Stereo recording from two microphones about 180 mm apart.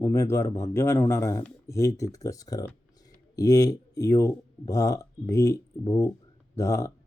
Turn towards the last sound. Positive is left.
turn(degrees=15)  # may be behind; listen again after turning